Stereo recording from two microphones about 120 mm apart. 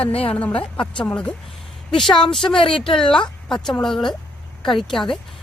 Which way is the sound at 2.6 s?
45° left (ahead or behind).